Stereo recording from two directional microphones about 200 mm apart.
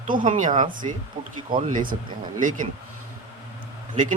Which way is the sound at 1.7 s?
40° right (ahead or behind).